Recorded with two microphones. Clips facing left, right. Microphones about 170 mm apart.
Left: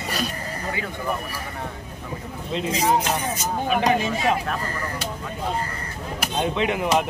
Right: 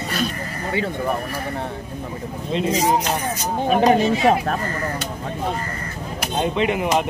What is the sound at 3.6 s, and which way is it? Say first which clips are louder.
Speech: right 6 dB; 40° right (ahead or behind).